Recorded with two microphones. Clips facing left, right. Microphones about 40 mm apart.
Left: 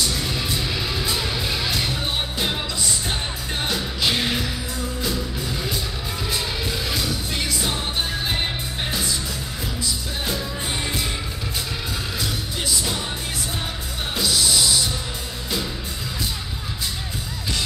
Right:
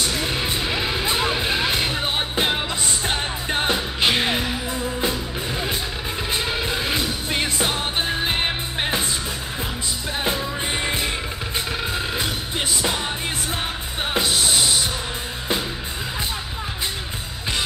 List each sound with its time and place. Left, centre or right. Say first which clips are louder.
0.0 s music: right 2 dB; right
9.8 s music: right 4 dB; right
12.2 s music: right 2 dB; right
14.1 s music: right 1 dB; right